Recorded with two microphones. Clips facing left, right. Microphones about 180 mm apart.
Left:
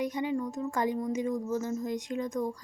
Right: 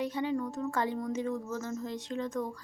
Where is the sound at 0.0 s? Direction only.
15° left (ahead or behind).